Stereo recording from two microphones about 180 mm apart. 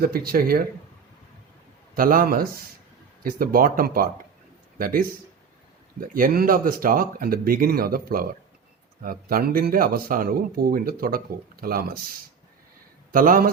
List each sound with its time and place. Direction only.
0.0 s speech: 55° right (ahead or behind)
2.0 s speech: 50° right (ahead or behind)
13.1 s a man's voice: 50° right (ahead or behind)